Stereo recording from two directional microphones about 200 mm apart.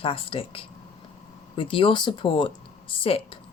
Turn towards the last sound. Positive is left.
turn(degrees=25)  # may be behind; listen again after turning